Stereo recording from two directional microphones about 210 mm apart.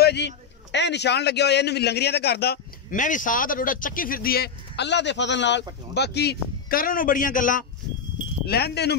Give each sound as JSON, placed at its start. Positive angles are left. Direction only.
{"t": 0.0, "sound": "a man's voice", "side_deg": 55}
{"t": 8.5, "sound": "a man's voice", "side_deg": 50}